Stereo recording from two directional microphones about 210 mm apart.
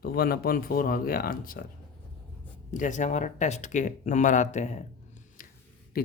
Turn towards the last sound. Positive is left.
turn(degrees=45)  # may be behind; listen again after turning